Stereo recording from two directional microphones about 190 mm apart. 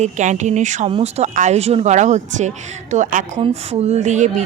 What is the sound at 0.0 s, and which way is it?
Speech, 40° right (ahead or behind).